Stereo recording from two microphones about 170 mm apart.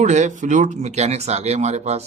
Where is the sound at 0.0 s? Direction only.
45° right (ahead or behind).